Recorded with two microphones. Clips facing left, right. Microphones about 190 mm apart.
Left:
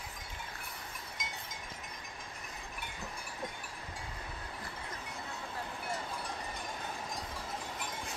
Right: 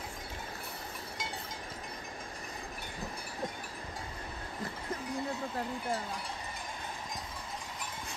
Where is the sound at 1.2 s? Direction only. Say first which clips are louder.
Right 5 dB; 30° right (ahead or behind).